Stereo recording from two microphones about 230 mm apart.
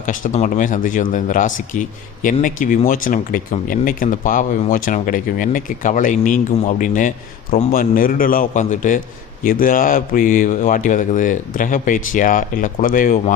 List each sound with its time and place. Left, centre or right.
0.0 s a man's voice: left